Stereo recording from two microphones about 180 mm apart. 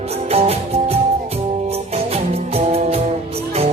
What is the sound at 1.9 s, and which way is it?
Music, 35° right (ahead or behind).